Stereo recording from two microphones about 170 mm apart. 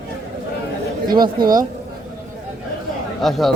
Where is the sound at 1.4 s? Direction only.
55° right (ahead or behind).